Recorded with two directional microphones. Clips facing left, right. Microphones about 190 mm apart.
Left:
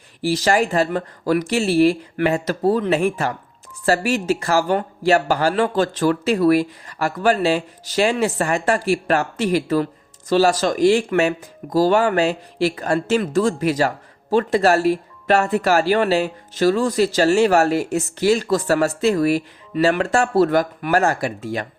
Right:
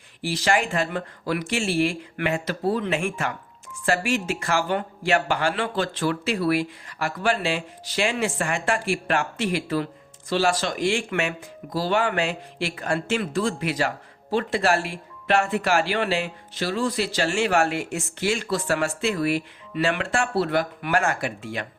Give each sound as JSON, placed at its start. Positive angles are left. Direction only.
{"t": 0.2, "sound": "speech", "side_deg": 40}